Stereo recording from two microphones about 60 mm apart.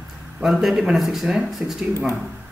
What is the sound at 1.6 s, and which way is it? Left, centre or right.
Speech, right.